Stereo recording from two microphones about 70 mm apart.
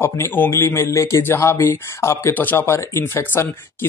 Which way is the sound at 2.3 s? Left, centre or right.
Left.